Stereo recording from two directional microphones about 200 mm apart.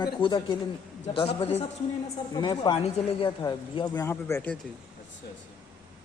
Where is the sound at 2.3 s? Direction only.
20° left (ahead or behind).